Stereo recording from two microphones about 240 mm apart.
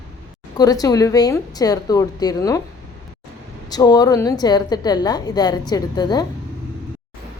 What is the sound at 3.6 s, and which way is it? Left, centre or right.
A woman's voice, centre.